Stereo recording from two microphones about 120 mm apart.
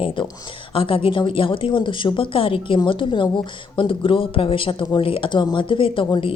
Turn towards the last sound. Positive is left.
turn(degrees=40)  # may be behind; listen again after turning